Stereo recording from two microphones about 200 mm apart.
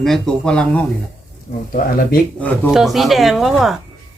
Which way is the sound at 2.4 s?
5° left (ahead or behind).